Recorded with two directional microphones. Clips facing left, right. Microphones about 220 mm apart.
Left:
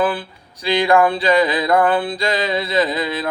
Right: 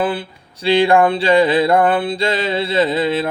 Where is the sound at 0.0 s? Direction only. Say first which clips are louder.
Even; 25° right (ahead or behind).